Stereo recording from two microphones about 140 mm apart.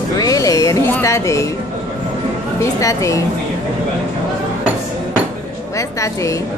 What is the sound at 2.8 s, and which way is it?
Speech, 20° left (ahead or behind).